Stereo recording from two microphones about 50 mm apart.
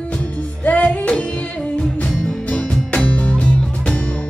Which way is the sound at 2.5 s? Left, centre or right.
Left.